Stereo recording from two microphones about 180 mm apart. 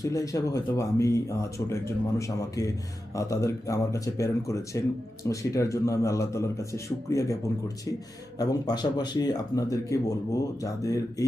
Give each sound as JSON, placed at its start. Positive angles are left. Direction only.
{"t": 0.0, "sound": "speech", "side_deg": 20}
{"t": 8.4, "sound": "speech", "side_deg": 20}